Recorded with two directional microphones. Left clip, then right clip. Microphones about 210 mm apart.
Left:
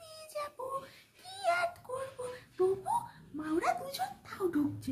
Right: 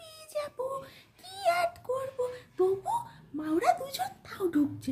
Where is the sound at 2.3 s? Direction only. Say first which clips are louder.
Right 1 dB; 25° right (ahead or behind).